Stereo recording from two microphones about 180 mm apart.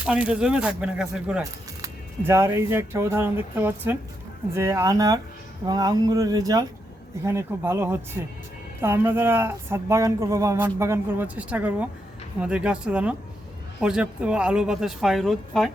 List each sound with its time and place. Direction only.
0.0 s a woman's voice: 5° right (ahead or behind)
1.8 s a woman's voice: 15° right (ahead or behind)